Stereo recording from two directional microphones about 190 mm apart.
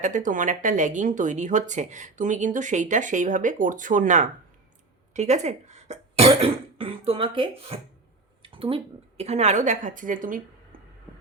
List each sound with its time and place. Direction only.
0.0 s speech: 40° right (ahead or behind)